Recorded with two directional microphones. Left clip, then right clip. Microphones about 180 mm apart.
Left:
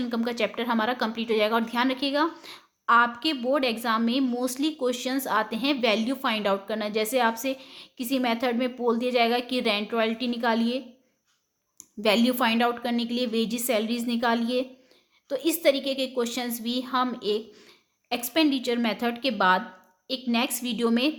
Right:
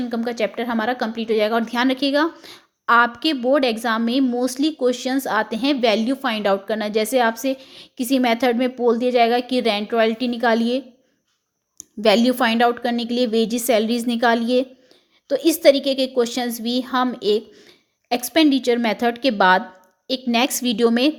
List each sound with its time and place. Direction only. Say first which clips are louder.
0.0 s a woman's voice: right 5 dB; 20° right (ahead or behind)
12.0 s a woman's voice: right 6 dB; 25° right (ahead or behind)
17.5 s a sound: right 4 dB; 20° right (ahead or behind)
18.1 s a woman's voice: right 7 dB; 30° right (ahead or behind)